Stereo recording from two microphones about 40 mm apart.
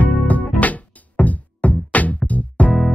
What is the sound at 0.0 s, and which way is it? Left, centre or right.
Music, left.